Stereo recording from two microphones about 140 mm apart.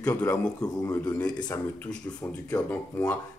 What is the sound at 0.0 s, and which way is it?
Speech, 10° left (ahead or behind).